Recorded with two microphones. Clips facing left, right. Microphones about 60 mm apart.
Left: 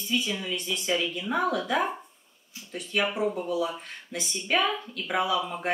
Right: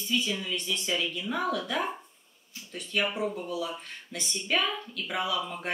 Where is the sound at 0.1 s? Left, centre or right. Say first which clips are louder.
Left 1 dB; centre.